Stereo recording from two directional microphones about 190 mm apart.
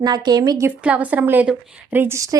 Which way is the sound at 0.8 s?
5° right (ahead or behind).